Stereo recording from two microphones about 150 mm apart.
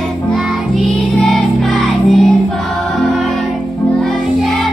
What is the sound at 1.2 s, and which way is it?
Music, centre (ahead or behind).